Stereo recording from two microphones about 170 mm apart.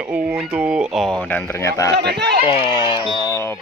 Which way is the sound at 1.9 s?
75° right (ahead or behind).